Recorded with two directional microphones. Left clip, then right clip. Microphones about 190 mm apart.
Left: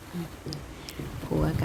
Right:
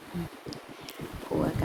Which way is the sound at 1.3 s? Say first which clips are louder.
Even; 5° right (ahead or behind).